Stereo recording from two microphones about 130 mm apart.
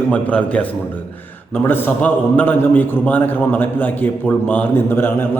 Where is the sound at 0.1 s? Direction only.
10° left (ahead or behind).